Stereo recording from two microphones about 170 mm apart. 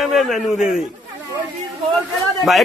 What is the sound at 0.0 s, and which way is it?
Speech, centre (ahead or behind).